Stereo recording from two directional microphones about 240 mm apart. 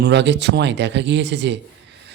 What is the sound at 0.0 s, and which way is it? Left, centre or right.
A man's voice, right.